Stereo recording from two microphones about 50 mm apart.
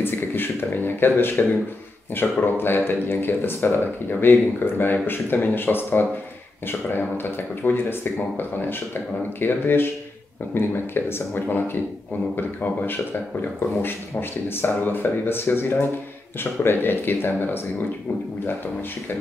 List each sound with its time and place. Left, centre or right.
0.0 s speech: left
11.4 s a man's voice: left
14.5 s speech: left